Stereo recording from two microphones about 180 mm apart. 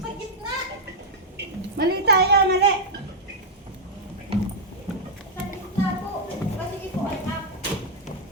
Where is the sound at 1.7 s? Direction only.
60° right (ahead or behind).